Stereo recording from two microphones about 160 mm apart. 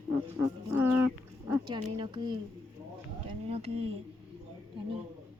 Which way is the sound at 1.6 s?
30° right (ahead or behind).